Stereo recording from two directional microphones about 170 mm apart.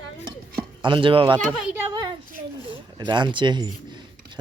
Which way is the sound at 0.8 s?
30° right (ahead or behind).